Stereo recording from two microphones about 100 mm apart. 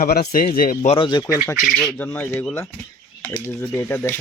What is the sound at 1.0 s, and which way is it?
Speech, 45° left (ahead or behind).